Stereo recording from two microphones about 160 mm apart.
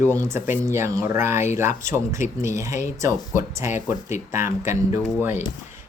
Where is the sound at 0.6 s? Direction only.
15° right (ahead or behind).